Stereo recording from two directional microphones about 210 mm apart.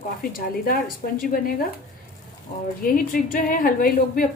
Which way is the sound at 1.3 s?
40° left (ahead or behind).